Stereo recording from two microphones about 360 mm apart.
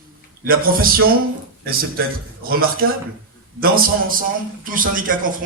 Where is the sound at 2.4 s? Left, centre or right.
Right.